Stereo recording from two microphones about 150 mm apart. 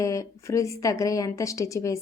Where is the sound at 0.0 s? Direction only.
20° left (ahead or behind).